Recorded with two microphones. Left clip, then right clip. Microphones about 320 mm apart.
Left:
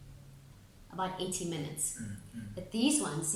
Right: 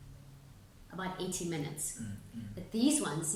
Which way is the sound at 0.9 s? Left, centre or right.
Centre.